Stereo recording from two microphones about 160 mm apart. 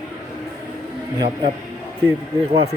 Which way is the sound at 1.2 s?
30° right (ahead or behind).